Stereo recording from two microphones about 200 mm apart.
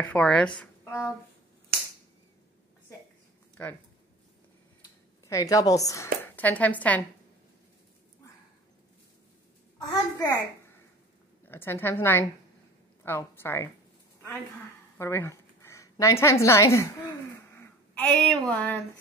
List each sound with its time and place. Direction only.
0.0 s speech: 5° left (ahead or behind)
3.6 s a woman's voice: 5° left (ahead or behind)
5.2 s a woman's voice: 15° left (ahead or behind)
9.8 s a child's voice: 15° left (ahead or behind)
11.4 s a woman's voice: 10° left (ahead or behind)
15.0 s a woman's voice: 15° left (ahead or behind)
17.9 s a woman's voice: 5° left (ahead or behind)